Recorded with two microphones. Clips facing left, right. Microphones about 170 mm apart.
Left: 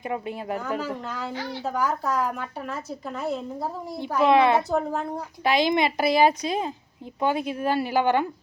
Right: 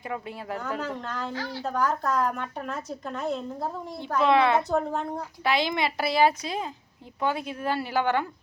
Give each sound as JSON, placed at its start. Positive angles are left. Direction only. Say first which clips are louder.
{"t": 0.0, "sound": "speech", "louder": "left 4 dB", "side_deg": 20}
{"t": 0.6, "sound": "speech", "louder": "left 2 dB", "side_deg": 5}
{"t": 1.3, "sound": "speech", "louder": "left 1 dB", "side_deg": 20}
{"t": 1.6, "sound": "speech", "louder": "even", "side_deg": 5}
{"t": 5.4, "sound": "speech", "louder": "left 4 dB", "side_deg": 15}